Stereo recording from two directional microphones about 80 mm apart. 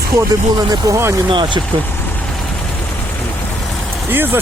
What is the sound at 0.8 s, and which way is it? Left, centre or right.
Speech, right.